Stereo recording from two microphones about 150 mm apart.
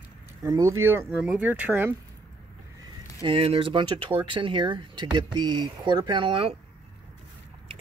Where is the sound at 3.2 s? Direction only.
35° right (ahead or behind).